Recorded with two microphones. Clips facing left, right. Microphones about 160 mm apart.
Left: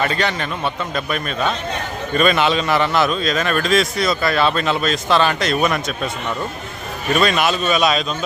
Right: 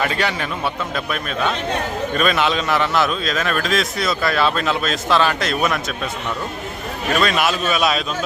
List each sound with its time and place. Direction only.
0.0 s a man's voice: 5° right (ahead or behind)
7.2 s a man's voice: centre (ahead or behind)